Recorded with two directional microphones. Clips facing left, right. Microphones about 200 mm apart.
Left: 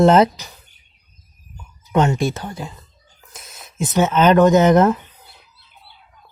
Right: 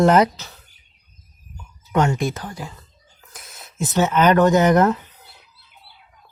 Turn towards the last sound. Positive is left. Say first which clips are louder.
# left 3 dB
turn(degrees=20)  # may be behind; listen again after turning